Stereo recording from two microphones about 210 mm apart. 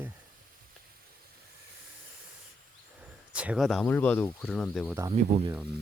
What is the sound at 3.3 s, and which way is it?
Speech, 5° right (ahead or behind).